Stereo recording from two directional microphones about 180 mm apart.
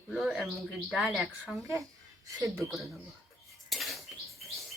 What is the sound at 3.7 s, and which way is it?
Cutlery, centre (ahead or behind).